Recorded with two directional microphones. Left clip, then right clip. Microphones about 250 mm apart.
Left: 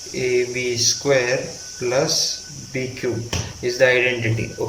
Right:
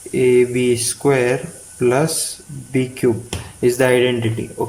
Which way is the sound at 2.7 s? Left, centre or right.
Right.